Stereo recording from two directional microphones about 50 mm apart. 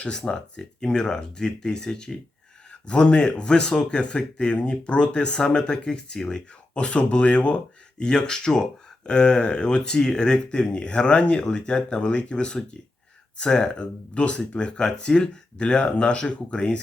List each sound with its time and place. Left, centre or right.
0.3 s speech: centre
2.8 s speech: left